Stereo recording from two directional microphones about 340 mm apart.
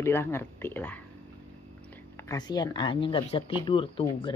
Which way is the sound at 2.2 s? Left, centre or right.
Centre.